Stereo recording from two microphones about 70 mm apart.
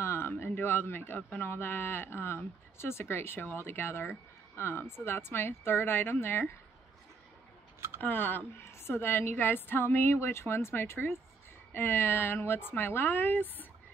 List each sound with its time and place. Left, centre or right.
0.0 s a sound: left
1.3 s speech: left
8.0 s speech: left